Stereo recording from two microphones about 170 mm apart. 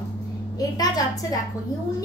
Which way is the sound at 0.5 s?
20° left (ahead or behind).